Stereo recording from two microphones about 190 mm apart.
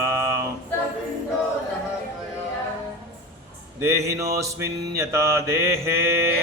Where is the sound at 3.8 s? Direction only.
15° right (ahead or behind).